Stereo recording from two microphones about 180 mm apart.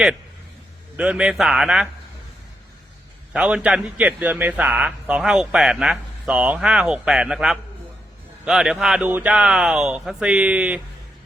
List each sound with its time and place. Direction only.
0.9 s a man's voice: 5° right (ahead or behind)
3.3 s a man's voice: 5° right (ahead or behind)